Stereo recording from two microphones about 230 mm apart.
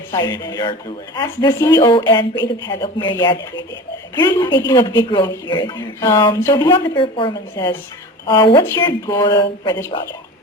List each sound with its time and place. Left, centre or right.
0.1 s a woman's voice: centre